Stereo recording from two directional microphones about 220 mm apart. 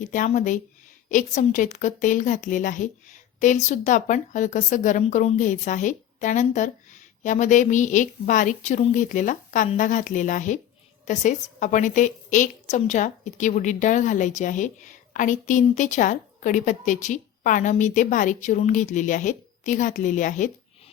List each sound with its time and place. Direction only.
0.0 s a woman's voice: 35° left (ahead or behind)